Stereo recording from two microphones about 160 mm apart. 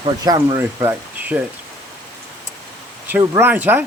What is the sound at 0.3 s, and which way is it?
Speech, 25° right (ahead or behind).